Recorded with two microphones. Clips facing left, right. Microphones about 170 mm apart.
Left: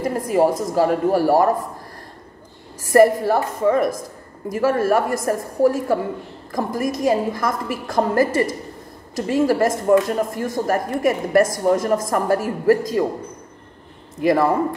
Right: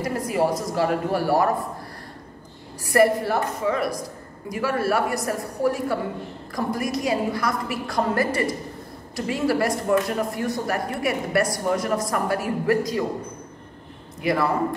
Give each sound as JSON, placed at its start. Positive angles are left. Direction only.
{"t": 0.3, "sound": "speech", "side_deg": 40}
{"t": 2.8, "sound": "speech", "side_deg": 45}
{"t": 14.2, "sound": "speech", "side_deg": 45}